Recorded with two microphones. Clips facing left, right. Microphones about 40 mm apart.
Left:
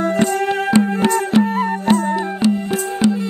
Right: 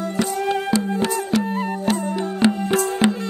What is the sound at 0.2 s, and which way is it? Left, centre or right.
Music, left.